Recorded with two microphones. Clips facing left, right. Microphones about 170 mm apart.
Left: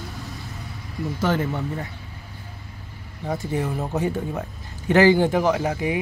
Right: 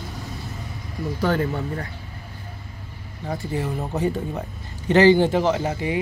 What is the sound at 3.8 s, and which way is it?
Speech, 15° left (ahead or behind).